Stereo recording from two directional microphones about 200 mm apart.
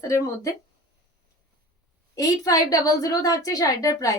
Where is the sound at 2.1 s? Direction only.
15° left (ahead or behind).